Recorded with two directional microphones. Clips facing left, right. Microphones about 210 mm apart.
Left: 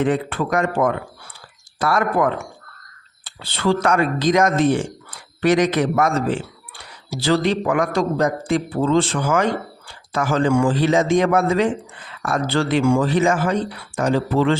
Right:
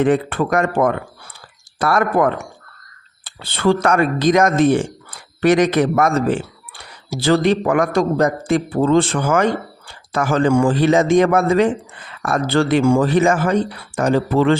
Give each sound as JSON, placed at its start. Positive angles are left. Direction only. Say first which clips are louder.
{"t": 0.0, "sound": "speech", "louder": "right 4 dB", "side_deg": -55}